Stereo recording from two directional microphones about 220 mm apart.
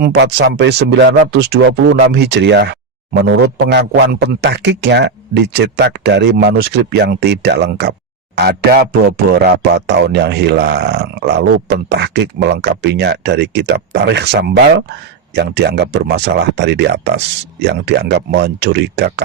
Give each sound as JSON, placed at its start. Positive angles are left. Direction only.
{"t": 0.0, "sound": "speech", "side_deg": -50}